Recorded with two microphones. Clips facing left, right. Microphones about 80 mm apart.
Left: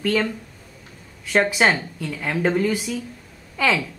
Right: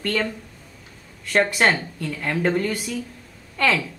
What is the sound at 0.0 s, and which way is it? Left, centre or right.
A woman's voice, centre.